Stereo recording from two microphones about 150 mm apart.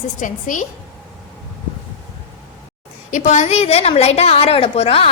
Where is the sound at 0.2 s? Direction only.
60° left (ahead or behind).